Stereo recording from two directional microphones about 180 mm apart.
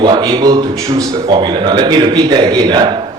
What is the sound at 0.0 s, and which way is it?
Speech, 25° right (ahead or behind).